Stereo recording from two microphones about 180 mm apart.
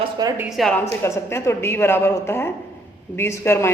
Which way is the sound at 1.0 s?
15° left (ahead or behind).